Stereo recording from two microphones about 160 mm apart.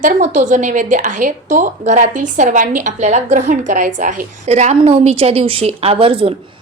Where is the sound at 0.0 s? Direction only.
50° right (ahead or behind).